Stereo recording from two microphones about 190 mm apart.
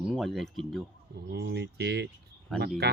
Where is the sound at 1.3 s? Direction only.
60° right (ahead or behind).